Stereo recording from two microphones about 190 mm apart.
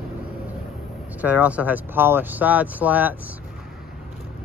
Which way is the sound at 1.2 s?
10° right (ahead or behind).